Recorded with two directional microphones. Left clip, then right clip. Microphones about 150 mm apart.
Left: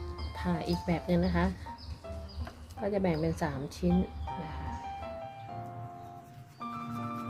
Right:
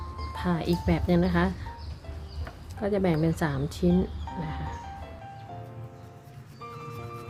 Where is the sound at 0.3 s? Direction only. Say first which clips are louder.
Right 5 dB; 15° right (ahead or behind).